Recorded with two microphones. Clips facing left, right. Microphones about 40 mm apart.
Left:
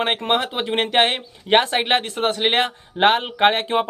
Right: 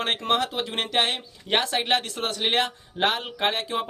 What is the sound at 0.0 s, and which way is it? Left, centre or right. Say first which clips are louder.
Speech: left 4 dB; left.